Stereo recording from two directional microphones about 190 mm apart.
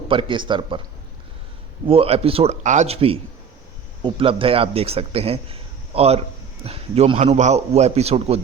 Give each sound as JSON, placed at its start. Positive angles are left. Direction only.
{"t": 0.1, "sound": "a man's voice", "side_deg": -25}
{"t": 1.9, "sound": "a man's voice", "side_deg": -30}